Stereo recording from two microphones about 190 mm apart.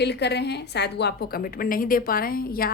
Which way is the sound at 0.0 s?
60° left (ahead or behind).